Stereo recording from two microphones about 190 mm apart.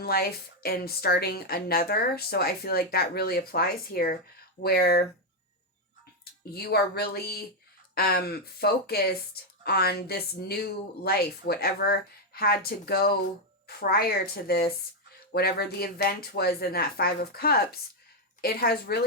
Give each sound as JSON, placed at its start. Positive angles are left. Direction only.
{"t": 0.0, "sound": "speech", "side_deg": 55}
{"t": 6.5, "sound": "speech", "side_deg": 55}